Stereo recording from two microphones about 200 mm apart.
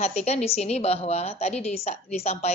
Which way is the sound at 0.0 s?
35° left (ahead or behind).